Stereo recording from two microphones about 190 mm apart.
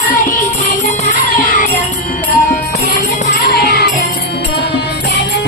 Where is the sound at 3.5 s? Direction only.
55° left (ahead or behind).